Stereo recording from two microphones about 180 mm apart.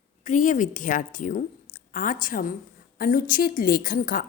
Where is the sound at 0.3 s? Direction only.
45° left (ahead or behind).